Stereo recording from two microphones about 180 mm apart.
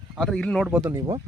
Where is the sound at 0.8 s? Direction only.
20° right (ahead or behind).